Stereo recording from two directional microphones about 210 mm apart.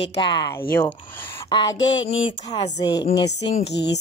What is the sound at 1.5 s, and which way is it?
Speech, 20° left (ahead or behind).